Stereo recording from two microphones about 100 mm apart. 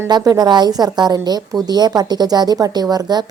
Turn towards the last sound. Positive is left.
turn(degrees=-40)  # may be behind; listen again after turning